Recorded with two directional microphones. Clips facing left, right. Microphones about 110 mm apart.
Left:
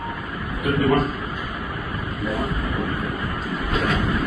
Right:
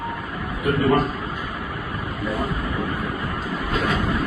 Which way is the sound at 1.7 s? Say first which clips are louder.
Even; centre (ahead or behind).